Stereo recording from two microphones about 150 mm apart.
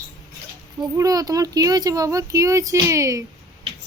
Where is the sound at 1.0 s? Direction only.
25° right (ahead or behind).